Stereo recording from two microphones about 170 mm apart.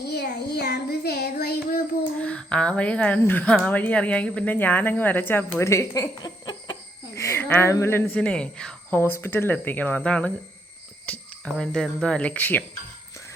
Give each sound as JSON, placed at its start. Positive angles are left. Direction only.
{"t": 0.0, "sound": "child singing", "side_deg": 75}
{"t": 2.1, "sound": "speech", "side_deg": 5}